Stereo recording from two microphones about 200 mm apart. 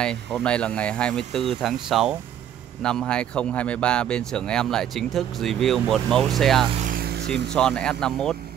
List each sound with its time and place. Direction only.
0.0 s speech: 5° left (ahead or behind)
6.7 s vehicle: 40° right (ahead or behind)
7.5 s speech: 5° left (ahead or behind)